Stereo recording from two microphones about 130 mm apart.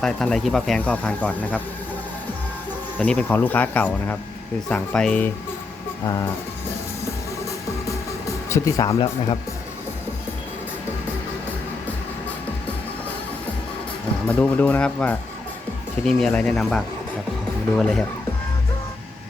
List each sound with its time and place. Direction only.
0.0 s speech: 5° left (ahead or behind)
3.0 s speech: 15° left (ahead or behind)
8.4 s speech: 25° left (ahead or behind)
14.3 s speech: 10° left (ahead or behind)